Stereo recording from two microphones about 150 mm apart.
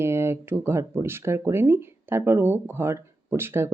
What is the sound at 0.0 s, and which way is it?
Speech, 15° right (ahead or behind).